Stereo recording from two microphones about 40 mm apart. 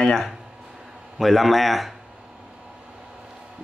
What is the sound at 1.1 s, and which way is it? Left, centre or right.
Speech, centre.